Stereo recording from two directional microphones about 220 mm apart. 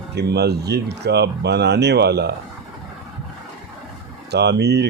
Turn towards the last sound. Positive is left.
turn(degrees=-50)  # may be behind; listen again after turning